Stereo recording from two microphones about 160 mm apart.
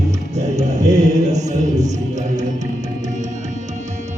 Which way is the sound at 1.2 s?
45° right (ahead or behind).